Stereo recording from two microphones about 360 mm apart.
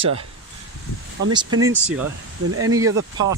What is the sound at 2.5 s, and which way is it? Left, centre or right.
Speech, right.